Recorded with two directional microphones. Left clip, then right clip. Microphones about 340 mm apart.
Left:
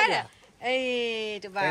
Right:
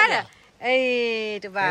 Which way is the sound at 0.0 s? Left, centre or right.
Centre.